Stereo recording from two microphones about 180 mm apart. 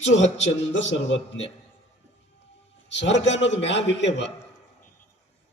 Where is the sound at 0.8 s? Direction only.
90° left.